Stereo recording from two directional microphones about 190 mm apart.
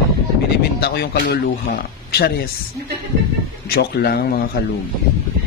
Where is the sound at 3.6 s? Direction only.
55° left (ahead or behind).